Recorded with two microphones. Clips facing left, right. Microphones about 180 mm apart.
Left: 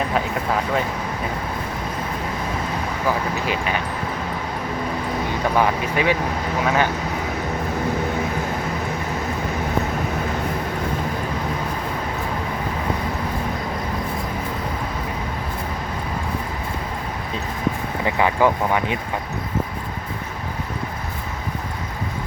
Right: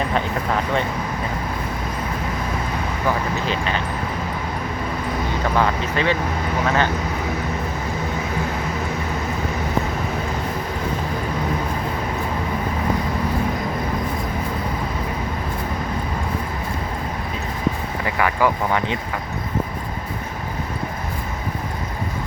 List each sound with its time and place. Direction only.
0.1 s a sound: 5° left (ahead or behind)
3.4 s speech: 10° left (ahead or behind)
5.5 s speech: 15° left (ahead or behind)
18.0 s speech: 20° left (ahead or behind)